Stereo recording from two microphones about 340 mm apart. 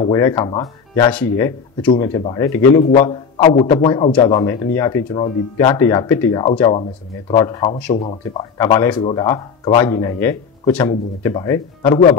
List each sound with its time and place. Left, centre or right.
0.0 s speech: centre